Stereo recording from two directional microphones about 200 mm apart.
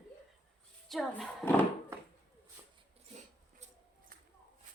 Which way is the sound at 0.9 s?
Centre (ahead or behind).